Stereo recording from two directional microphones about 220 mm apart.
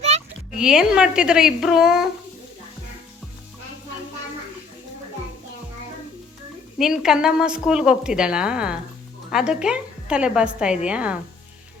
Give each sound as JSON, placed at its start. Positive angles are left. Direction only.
{"t": 0.5, "sound": "a woman's voice", "side_deg": -5}
{"t": 6.7, "sound": "a woman's voice", "side_deg": 0}